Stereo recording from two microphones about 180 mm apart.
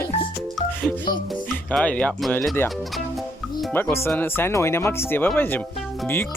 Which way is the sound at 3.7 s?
10° left (ahead or behind).